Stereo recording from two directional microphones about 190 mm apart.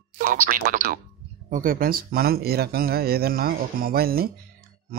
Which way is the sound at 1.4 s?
45° right (ahead or behind).